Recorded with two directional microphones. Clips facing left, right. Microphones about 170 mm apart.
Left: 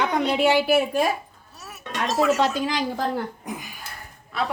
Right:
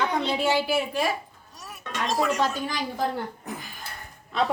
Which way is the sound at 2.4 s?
90° left.